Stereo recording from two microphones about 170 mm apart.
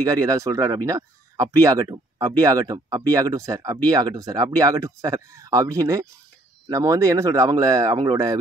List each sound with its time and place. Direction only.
0.0 s speech: 20° right (ahead or behind)